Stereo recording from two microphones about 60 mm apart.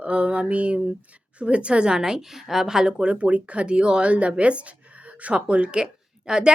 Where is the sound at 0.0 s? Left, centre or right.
Right.